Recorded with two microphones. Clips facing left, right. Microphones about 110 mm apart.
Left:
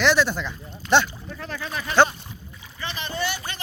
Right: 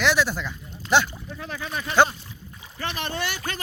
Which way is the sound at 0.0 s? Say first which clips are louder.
Left 2 dB; 5° right (ahead or behind).